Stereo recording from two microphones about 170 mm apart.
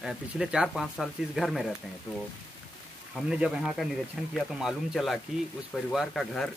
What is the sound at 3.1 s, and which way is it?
Speech, 5° right (ahead or behind).